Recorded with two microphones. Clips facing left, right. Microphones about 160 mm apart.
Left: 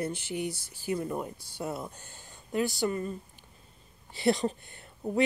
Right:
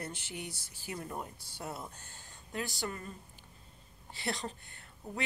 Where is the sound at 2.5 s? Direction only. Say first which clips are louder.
Left 10 dB; 15° left (ahead or behind).